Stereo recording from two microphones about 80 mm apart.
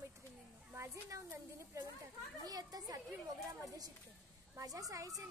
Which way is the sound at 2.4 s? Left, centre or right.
Right.